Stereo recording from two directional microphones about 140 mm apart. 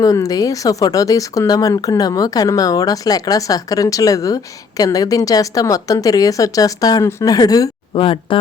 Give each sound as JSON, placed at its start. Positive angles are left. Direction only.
{"t": 0.0, "sound": "speech", "side_deg": 25}
{"t": 8.0, "sound": "speech", "side_deg": 40}